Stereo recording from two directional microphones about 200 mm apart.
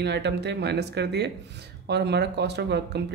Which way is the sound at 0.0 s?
60° right (ahead or behind).